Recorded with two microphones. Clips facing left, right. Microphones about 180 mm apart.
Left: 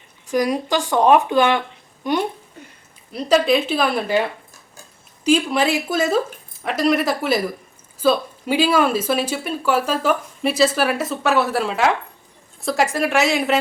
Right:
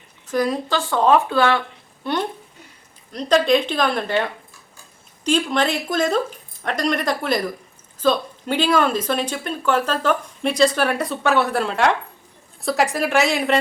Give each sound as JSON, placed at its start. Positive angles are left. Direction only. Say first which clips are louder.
{"t": 0.3, "sound": "a woman's voice", "louder": "left 2 dB", "side_deg": 10}